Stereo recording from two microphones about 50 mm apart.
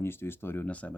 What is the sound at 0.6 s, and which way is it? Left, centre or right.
Speech, left.